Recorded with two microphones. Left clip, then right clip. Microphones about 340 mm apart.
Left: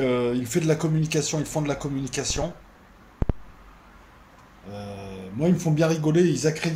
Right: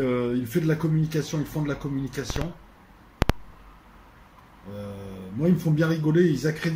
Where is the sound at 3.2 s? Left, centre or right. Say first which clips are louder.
Right 6 dB; right.